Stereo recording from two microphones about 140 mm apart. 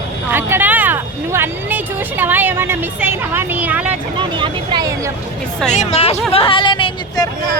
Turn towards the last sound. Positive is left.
turn(degrees=35)  # may be behind; listen again after turning